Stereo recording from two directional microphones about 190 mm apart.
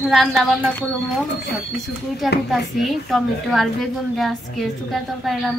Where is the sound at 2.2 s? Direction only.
Centre (ahead or behind).